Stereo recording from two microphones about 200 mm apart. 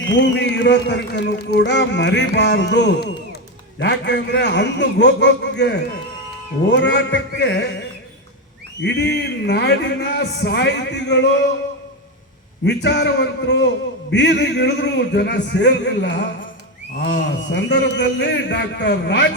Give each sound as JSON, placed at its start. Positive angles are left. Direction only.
{"t": 0.1, "sound": "a man's voice", "side_deg": 60}
{"t": 8.8, "sound": "a man's voice", "side_deg": 60}
{"t": 12.6, "sound": "a man's voice", "side_deg": 60}